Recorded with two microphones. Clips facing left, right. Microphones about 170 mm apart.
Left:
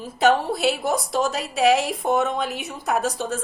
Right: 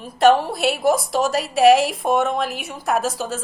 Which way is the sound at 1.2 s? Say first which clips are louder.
Right 6 dB; 65° right (ahead or behind).